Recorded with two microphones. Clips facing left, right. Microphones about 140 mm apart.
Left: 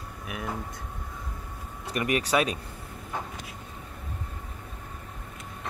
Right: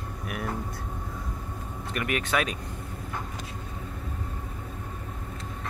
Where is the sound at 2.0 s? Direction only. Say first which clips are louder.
Left 3 dB; 35° left (ahead or behind).